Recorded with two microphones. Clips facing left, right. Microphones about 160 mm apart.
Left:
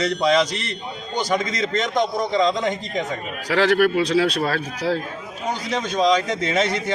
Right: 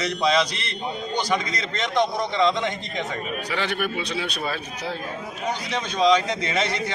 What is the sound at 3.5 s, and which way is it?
Speech, 90° left.